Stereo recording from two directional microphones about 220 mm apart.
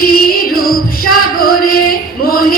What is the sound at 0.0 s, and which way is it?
Music, 40° left (ahead or behind).